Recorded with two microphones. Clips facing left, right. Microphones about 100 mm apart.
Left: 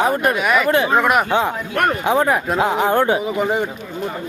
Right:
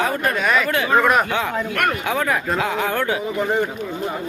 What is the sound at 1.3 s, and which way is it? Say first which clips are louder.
Speech: left 3 dB; 30° left (ahead or behind).